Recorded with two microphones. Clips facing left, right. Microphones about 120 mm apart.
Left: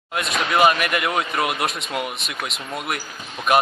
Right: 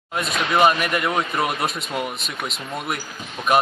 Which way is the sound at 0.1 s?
5° left (ahead or behind).